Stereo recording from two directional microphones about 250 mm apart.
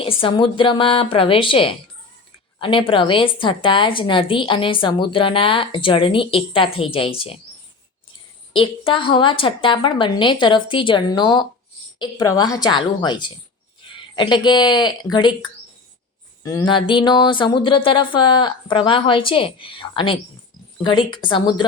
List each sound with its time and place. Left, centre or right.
0.0 s a woman's voice: left
8.5 s a woman's voice: centre
16.4 s a woman's voice: centre